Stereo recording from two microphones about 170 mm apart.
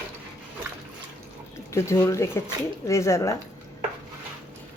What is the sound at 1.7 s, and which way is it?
Speech, 15° left (ahead or behind).